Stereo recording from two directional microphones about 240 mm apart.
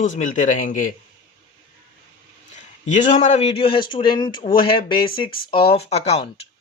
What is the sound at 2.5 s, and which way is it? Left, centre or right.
Speech, left.